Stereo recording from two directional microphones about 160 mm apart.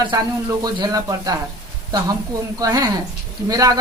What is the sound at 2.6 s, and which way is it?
A man's voice, 25° right (ahead or behind).